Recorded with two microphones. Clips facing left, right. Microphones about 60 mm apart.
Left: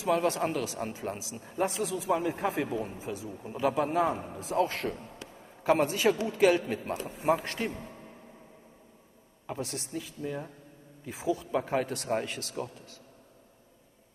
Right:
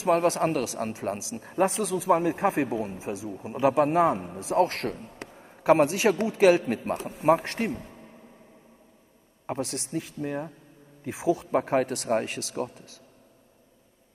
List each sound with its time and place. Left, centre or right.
0.0 s a man's voice: right
3.0 s a man's voice: right
3.5 s speech: right
4.4 s a man's voice: right
5.2 s a sound: right
5.6 s speech: right
9.6 s speech: right
11.1 s a man's voice: right
11.5 s speech: right